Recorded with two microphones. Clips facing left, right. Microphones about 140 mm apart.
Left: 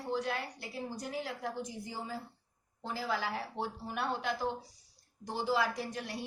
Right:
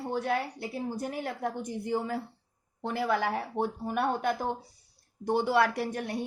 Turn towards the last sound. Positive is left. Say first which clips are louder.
# right 7 dB
turn(degrees=-55)  # may be behind; listen again after turning